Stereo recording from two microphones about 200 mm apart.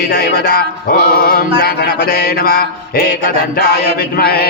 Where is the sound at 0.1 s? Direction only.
45° left (ahead or behind).